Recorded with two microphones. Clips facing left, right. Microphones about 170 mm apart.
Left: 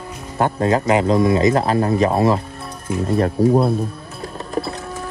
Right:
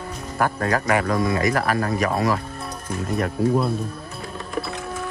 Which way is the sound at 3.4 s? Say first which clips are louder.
Left 5 dB; 40° left (ahead or behind).